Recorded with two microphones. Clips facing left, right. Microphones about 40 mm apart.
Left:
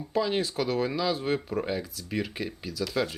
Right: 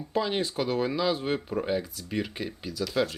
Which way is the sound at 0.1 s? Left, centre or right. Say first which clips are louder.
Left 1 dB; centre.